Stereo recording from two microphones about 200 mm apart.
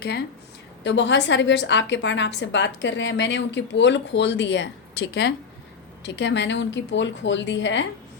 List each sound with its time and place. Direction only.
0.9 s a woman's voice: 60° left (ahead or behind)